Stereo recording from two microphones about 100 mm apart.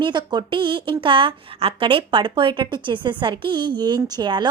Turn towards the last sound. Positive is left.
turn(degrees=-45)  # may be behind; listen again after turning